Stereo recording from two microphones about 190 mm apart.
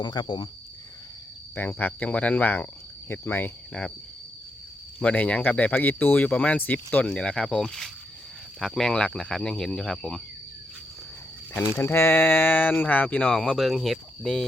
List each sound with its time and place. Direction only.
0.0 s speech: 25° left (ahead or behind)
1.5 s speech: 10° left (ahead or behind)
4.9 s speech: 5° left (ahead or behind)
11.7 s speech: 10° left (ahead or behind)